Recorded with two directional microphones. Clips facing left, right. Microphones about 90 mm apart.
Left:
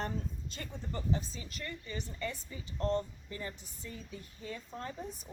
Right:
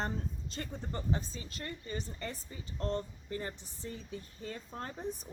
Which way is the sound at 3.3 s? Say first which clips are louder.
Right 5 dB; 40° right (ahead or behind).